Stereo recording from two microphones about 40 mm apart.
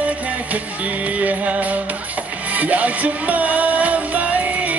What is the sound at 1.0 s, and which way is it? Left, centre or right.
Music, right.